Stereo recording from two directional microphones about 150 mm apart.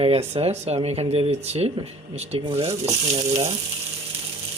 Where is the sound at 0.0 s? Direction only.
35° right (ahead or behind).